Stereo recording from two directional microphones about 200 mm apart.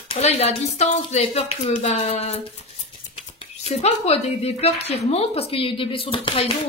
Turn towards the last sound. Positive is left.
turn(degrees=25)  # may be behind; listen again after turning